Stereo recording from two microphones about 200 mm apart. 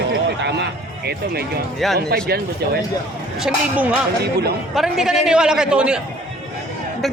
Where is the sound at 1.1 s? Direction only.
55° right (ahead or behind).